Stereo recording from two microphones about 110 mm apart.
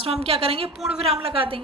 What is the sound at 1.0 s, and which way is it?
Speech, 60° right (ahead or behind).